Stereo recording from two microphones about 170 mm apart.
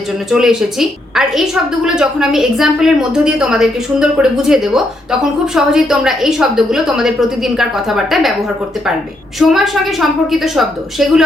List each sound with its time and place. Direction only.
0.3 s a woman's voice: centre (ahead or behind)
9.4 s a woman's voice: centre (ahead or behind)